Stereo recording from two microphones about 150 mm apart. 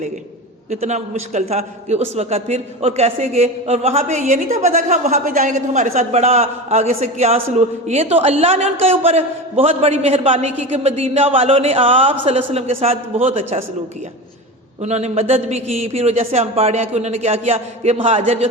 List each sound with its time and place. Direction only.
0.7 s a man's voice: 50° right (ahead or behind)
14.8 s a man's voice: 45° right (ahead or behind)